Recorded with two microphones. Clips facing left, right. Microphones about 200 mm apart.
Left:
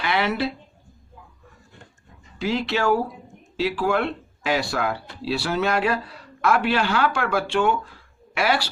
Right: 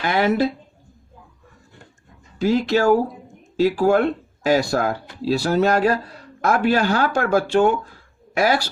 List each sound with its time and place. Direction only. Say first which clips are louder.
0.0 s a man's voice: right 5 dB; 45° right (ahead or behind)
2.4 s a man's voice: right 6 dB; 45° right (ahead or behind)